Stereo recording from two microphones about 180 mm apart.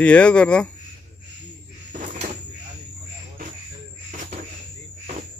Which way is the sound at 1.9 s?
45° right (ahead or behind).